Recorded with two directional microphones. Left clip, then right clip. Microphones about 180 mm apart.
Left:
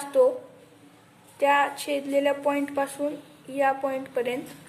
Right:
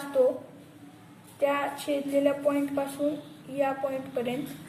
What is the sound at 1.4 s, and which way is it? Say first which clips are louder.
A woman's voice: left 5 dB; 50° left (ahead or behind).